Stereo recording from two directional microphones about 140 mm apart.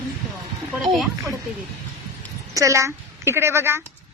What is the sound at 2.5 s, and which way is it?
A woman's voice, 25° right (ahead or behind).